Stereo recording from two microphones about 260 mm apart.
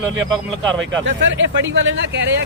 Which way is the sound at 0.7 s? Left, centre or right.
Right.